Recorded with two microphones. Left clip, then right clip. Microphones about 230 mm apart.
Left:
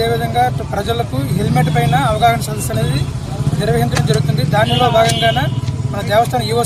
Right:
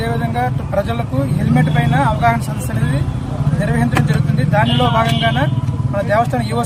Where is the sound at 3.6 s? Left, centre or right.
Centre.